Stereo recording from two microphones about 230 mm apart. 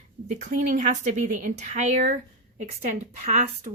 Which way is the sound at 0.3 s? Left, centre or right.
Right.